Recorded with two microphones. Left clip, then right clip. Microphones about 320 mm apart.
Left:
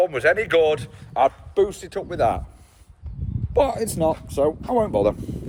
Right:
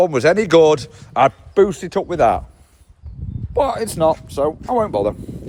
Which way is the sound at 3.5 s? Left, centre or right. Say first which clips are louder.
Right 2 dB; centre.